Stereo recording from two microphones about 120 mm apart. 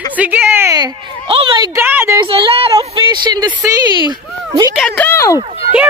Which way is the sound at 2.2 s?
50° right (ahead or behind).